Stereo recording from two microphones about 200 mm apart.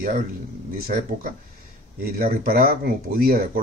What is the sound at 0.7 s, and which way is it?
Speech, 50° right (ahead or behind).